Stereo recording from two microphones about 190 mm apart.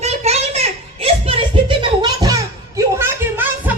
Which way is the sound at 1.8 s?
20° right (ahead or behind).